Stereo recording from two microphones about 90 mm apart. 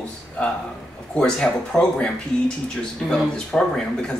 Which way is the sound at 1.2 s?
10° left (ahead or behind).